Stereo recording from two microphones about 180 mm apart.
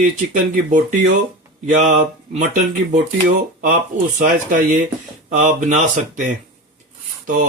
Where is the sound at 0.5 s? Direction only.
45° right (ahead or behind).